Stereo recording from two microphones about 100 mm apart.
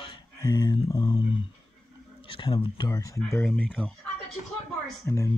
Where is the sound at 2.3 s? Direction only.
60° left (ahead or behind).